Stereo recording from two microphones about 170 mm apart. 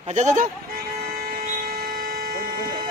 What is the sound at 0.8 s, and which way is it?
Vehicle, 65° right (ahead or behind).